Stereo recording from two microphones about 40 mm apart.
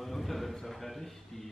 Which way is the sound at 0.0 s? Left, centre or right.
Centre.